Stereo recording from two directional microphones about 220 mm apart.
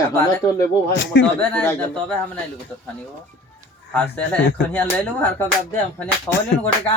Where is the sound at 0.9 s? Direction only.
55° left (ahead or behind).